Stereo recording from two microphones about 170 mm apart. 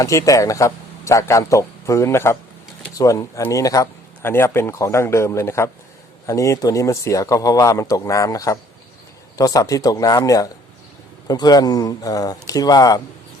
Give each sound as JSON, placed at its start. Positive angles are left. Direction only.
{"t": 0.0, "sound": "speech", "side_deg": 20}